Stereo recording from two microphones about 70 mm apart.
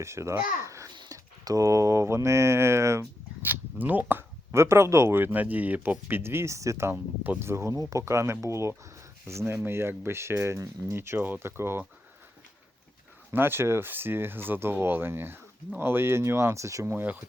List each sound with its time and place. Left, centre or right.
0.0 s speech: right
0.6 s babbling: right
1.1 s speech: right
3.4 s speech: right
6.9 s speech: right
13.3 s speech: right